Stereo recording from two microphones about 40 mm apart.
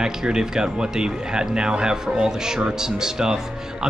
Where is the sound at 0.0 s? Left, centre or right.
Centre.